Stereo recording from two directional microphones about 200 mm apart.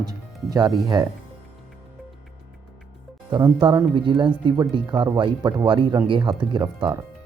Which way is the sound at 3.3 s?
20° right (ahead or behind).